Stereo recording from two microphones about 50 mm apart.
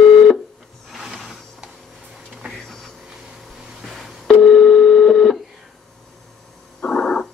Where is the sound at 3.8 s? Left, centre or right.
Centre.